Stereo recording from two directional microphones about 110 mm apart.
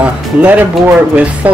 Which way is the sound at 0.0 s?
15° right (ahead or behind).